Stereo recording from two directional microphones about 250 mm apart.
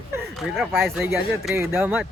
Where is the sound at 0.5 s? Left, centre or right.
Centre.